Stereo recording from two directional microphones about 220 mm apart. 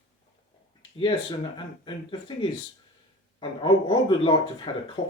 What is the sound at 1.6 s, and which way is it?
Speech, 20° left (ahead or behind).